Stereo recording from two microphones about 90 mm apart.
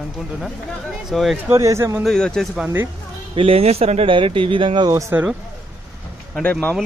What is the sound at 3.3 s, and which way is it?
Speech, 90° right.